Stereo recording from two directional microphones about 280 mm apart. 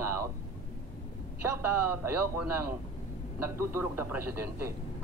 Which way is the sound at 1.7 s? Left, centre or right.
Right.